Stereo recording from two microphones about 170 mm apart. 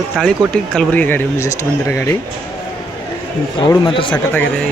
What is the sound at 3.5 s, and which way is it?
Speech, 25° left (ahead or behind).